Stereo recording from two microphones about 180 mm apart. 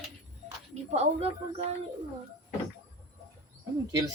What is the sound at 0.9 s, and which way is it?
Speech, 35° right (ahead or behind).